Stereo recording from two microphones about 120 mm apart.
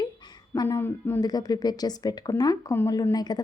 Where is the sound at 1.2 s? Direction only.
35° left (ahead or behind).